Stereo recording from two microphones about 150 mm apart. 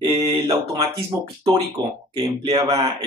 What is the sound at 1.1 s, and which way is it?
Speech, 30° right (ahead or behind).